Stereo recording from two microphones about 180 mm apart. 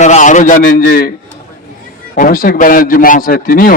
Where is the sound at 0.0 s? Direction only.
45° left (ahead or behind).